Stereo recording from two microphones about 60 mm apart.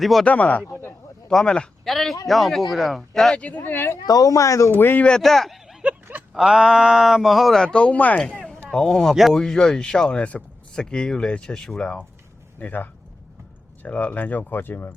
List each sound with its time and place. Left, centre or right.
0.0 s speech: centre
0.3 s speech: left
1.3 s speech: centre
3.3 s speech: left
3.6 s speech: left
4.0 s speech: left
4.8 s speech: left
5.0 s speech: centre
5.8 s a sound: right
6.3 s speech: centre
7.6 s speech: centre
8.4 s a sound: centre
9.3 s speech: centre
12.5 s speech: left